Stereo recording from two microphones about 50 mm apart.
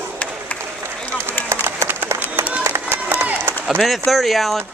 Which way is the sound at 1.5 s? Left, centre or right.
Right.